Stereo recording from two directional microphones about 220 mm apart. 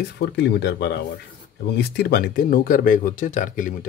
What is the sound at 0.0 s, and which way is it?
Speech, 50° left (ahead or behind).